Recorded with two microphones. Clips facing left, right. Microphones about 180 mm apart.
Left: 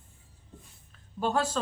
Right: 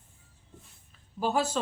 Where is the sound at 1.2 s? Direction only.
5° right (ahead or behind).